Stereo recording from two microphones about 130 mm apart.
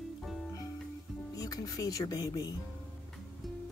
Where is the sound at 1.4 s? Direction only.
30° left (ahead or behind).